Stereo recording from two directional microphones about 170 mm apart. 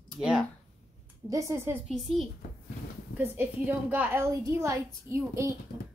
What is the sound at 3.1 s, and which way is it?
A woman's voice, 10° right (ahead or behind).